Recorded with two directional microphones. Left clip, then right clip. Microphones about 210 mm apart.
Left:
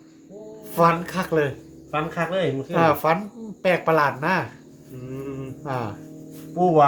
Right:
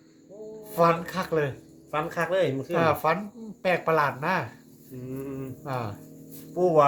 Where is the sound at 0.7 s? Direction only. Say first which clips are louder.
Left 3 dB; 10° left (ahead or behind).